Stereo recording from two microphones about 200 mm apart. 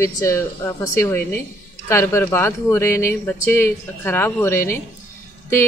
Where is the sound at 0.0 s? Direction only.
15° left (ahead or behind).